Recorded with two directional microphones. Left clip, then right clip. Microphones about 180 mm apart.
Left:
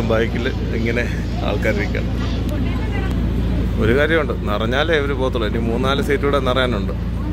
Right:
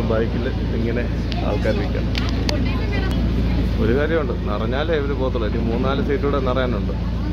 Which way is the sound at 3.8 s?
15° left (ahead or behind).